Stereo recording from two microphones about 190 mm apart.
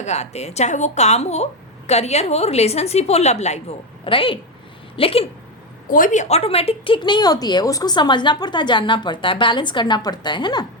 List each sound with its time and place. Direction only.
0.0 s a woman's voice: 35° left (ahead or behind)
5.9 s speech: 45° left (ahead or behind); by 10.7 s 25° left (ahead or behind)